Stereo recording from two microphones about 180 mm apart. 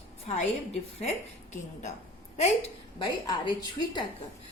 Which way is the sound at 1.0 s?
40° left (ahead or behind).